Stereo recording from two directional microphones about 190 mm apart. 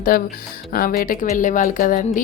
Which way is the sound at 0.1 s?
50° left (ahead or behind).